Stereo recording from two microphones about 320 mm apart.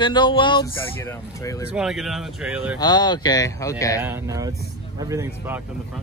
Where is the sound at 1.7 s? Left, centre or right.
Centre.